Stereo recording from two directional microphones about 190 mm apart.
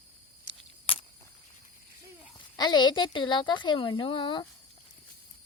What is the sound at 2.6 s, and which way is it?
A woman's voice, 25° left (ahead or behind).